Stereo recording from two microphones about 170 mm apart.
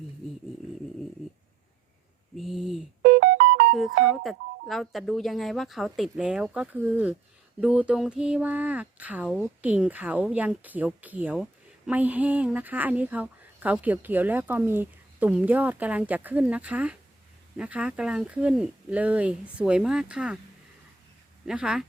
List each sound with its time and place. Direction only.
2.4 s a sound: centre (ahead or behind)
3.0 s music: 55° right (ahead or behind)
4.0 s speech: centre (ahead or behind)
21.4 s speech: 5° right (ahead or behind)